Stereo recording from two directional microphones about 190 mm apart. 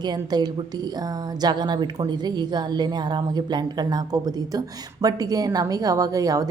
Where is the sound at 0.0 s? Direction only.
20° right (ahead or behind).